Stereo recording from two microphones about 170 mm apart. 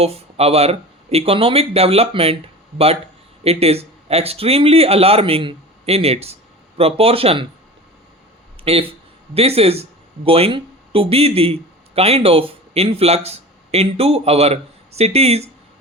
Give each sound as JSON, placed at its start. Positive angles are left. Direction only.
{"t": 0.0, "sound": "speech", "side_deg": -35}
{"t": 8.6, "sound": "speech", "side_deg": -35}